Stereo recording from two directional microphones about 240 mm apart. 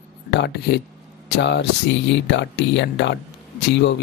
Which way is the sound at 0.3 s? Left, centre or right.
Left.